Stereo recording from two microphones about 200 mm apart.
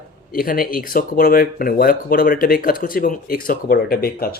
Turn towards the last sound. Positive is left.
turn(degrees=50)  # may be behind; listen again after turning